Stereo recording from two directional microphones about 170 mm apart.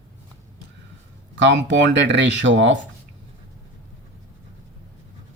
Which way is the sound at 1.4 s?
90° right.